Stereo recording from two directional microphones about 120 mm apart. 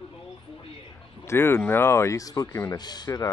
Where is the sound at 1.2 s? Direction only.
20° left (ahead or behind).